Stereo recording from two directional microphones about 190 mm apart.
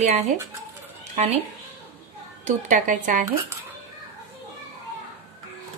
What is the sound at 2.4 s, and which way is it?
Speech, 40° right (ahead or behind).